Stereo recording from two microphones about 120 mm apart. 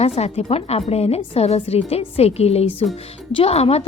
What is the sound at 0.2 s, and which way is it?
A woman's voice, 60° left (ahead or behind).